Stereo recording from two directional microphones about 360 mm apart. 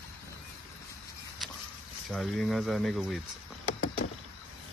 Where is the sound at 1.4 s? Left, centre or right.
Centre.